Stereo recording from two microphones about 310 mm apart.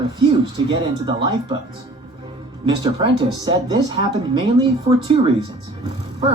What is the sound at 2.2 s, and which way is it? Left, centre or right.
Music, centre.